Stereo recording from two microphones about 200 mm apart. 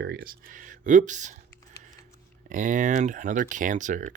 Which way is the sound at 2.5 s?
40° right (ahead or behind).